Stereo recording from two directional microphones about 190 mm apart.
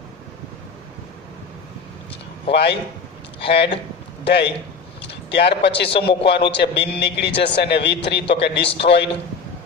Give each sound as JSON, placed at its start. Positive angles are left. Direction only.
{"t": 2.5, "sound": "a man's voice", "side_deg": 60}
{"t": 5.0, "sound": "a sound", "side_deg": 65}
{"t": 5.9, "sound": "a man's voice", "side_deg": 65}